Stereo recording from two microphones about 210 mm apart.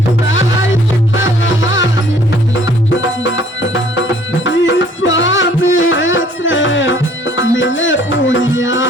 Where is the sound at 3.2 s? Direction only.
65° left (ahead or behind).